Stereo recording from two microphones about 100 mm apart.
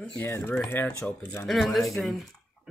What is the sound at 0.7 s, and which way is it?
Speech, 20° left (ahead or behind).